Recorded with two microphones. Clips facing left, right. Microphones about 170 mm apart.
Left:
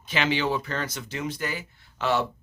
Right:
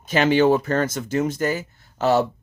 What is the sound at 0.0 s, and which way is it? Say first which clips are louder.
Speech: right 9 dB; 45° right (ahead or behind).